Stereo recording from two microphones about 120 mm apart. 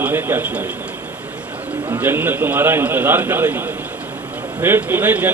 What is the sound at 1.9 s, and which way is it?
A man's voice, 15° right (ahead or behind).